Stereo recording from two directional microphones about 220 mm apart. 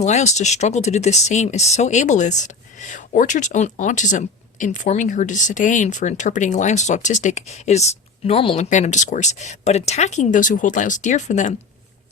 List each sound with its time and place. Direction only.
0.0 s speech: 30° left (ahead or behind)